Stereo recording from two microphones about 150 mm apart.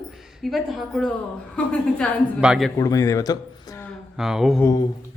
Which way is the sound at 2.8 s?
20° left (ahead or behind).